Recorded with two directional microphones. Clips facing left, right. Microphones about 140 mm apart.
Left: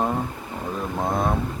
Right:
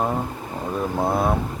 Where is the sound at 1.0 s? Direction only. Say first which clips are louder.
Right 2 dB; 5° right (ahead or behind).